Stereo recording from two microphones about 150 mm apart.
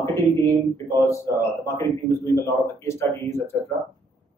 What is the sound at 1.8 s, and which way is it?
Speech, 20° left (ahead or behind).